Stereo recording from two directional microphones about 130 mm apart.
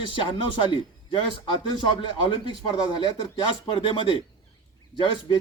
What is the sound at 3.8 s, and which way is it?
Speech, 40° left (ahead or behind).